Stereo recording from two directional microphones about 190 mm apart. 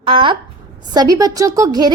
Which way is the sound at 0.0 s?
25° right (ahead or behind).